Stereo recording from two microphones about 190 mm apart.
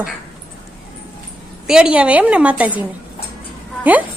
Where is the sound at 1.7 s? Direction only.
5° right (ahead or behind).